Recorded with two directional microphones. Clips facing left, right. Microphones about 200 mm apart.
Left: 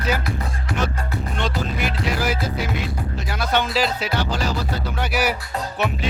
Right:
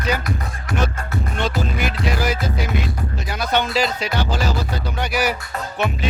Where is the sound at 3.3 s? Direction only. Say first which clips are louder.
Right 1 dB; centre (ahead or behind).